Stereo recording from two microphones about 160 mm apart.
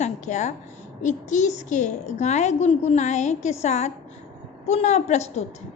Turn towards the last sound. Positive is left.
turn(degrees=40)  # may be behind; listen again after turning